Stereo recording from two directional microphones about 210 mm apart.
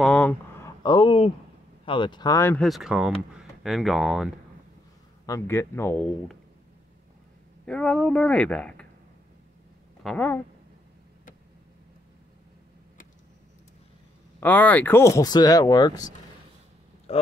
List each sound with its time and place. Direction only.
0.0 s a sound: 5° left (ahead or behind)
0.8 s speech: 20° left (ahead or behind); by 4.3 s centre (ahead or behind)
5.2 s speech: 15° left (ahead or behind)
7.6 s speech: 5° left (ahead or behind)
10.0 s speech: 5° left (ahead or behind)
14.4 s speech: 10° left (ahead or behind)
17.1 s speech: 30° left (ahead or behind)